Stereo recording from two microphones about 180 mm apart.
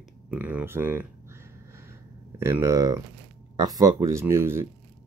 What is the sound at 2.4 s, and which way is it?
Speech, 15° right (ahead or behind).